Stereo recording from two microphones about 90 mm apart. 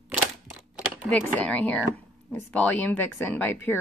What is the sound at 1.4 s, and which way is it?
A woman's voice, 15° left (ahead or behind).